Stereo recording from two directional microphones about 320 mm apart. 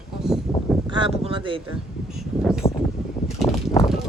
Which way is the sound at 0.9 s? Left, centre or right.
Centre.